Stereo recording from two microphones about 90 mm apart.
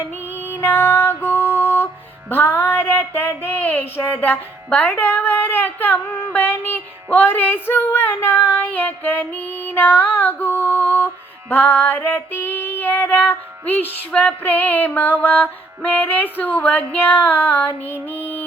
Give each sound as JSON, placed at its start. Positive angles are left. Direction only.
{"t": 0.5, "sound": "music", "side_deg": 25}
{"t": 2.3, "sound": "speech", "side_deg": 25}